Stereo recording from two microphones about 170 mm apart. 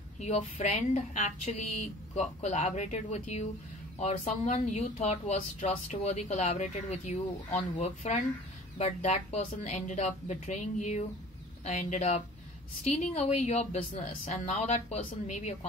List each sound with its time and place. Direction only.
0.2 s a woman's voice: 40° left (ahead or behind)